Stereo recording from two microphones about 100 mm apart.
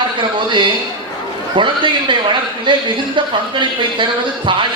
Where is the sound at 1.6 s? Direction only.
55° right (ahead or behind).